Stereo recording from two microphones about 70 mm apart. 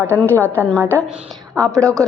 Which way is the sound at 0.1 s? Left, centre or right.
Left.